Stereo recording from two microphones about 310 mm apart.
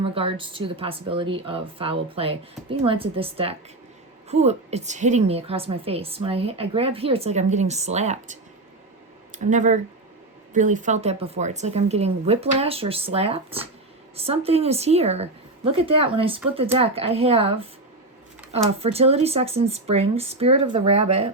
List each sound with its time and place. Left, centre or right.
0.0 s a woman's voice: centre